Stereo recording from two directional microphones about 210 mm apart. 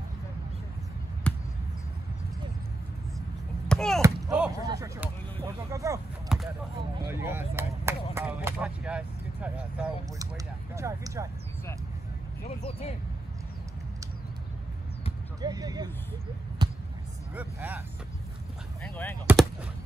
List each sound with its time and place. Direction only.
1.3 s basketball bounce: 5° left (ahead or behind)
3.6 s chop: 5° left (ahead or behind)
4.6 s speech: 15° right (ahead or behind)
6.2 s a sound: centre (ahead or behind)
7.1 s speech: 10° right (ahead or behind)
12.4 s speech: 30° left (ahead or behind)
15.4 s speech: 20° right (ahead or behind)
16.6 s basketball bounce: 25° right (ahead or behind)
17.4 s speech: 10° right (ahead or behind)
18.8 s speech: 10° left (ahead or behind)